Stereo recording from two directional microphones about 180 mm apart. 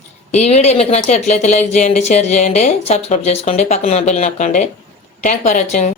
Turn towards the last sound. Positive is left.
turn(degrees=40)  # may be behind; listen again after turning